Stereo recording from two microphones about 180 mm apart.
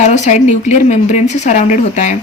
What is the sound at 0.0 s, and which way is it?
A woman's voice, 40° left (ahead or behind).